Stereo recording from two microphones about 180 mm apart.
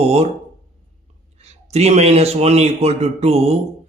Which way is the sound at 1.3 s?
35° right (ahead or behind).